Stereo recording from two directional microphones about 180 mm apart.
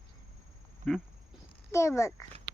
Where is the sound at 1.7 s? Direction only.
15° left (ahead or behind).